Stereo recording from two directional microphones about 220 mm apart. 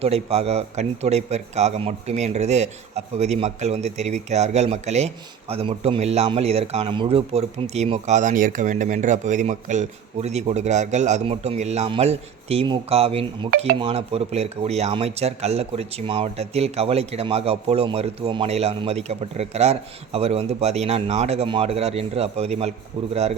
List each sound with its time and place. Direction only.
0.0 s a man's voice: 30° right (ahead or behind)